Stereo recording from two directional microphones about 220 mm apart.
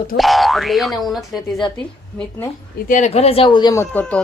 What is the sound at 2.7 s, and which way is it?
Speech, 35° left (ahead or behind).